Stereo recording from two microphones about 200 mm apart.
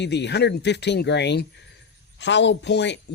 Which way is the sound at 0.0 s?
60° left (ahead or behind).